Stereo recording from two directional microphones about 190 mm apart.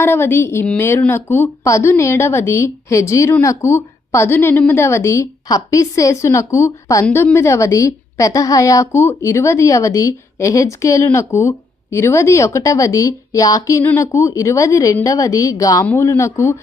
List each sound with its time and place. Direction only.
0.0 s a woman's voice: 10° left (ahead or behind)